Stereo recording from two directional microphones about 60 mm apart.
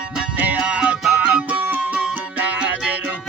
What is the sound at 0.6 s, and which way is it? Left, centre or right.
Music, centre.